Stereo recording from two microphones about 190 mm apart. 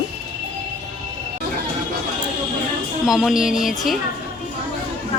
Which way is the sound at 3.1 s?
Centre (ahead or behind).